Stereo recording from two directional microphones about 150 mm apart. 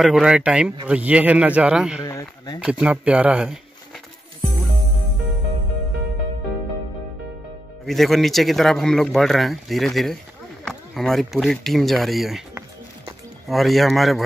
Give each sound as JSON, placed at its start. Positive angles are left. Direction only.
{"t": 0.0, "sound": "a man's voice", "side_deg": -5}
{"t": 2.0, "sound": "speech", "side_deg": 25}
{"t": 2.6, "sound": "a man's voice", "side_deg": -10}
{"t": 7.8, "sound": "speech", "side_deg": 0}
{"t": 13.5, "sound": "speech", "side_deg": 0}